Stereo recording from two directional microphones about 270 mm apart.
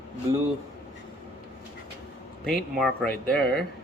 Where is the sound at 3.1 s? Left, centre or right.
Left.